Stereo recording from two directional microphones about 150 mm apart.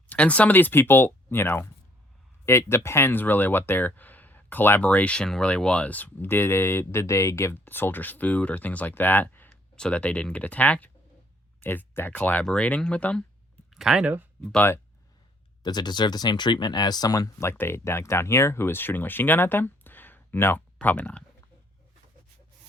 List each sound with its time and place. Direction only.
0.1 s speech: 10° left (ahead or behind); by 14.3 s 10° right (ahead or behind)
14.4 s speech: 10° left (ahead or behind)
15.6 s speech: 30° left (ahead or behind); by 21.2 s 10° left (ahead or behind)